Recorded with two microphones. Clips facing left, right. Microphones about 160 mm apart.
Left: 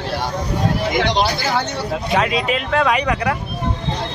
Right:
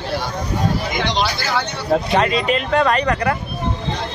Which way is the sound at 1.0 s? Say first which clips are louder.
Left 5 dB; 55° left (ahead or behind).